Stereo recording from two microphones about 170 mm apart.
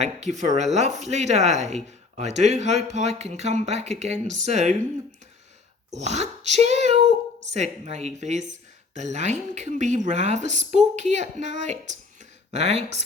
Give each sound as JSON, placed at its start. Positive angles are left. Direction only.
{"t": 0.0, "sound": "speech", "side_deg": -45}
{"t": 5.9, "sound": "a woman's voice", "side_deg": -40}